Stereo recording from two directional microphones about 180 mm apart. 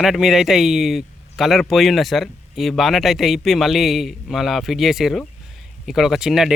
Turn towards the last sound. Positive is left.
turn(degrees=-5)  # may be behind; listen again after turning